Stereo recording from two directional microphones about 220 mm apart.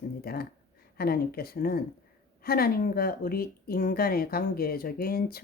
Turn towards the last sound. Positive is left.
turn(degrees=45)  # may be behind; listen again after turning